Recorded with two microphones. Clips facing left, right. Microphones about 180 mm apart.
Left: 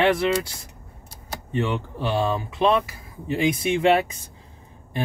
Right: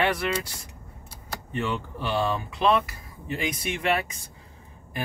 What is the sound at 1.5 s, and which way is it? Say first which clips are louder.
Speech: left 4 dB; 20° left (ahead or behind).